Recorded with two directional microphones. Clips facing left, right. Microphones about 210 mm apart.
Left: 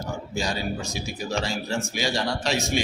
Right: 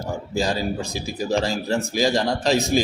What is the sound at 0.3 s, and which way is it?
A man's voice, 35° right (ahead or behind).